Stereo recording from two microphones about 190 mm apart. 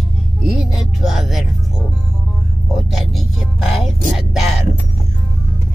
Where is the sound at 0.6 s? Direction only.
Centre (ahead or behind).